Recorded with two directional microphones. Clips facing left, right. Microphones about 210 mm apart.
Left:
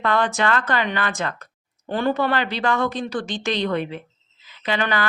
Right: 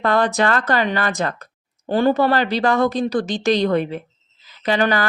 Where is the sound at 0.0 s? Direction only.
40° right (ahead or behind).